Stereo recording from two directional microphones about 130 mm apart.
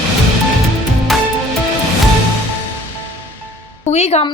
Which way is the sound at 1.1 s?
Centre (ahead or behind).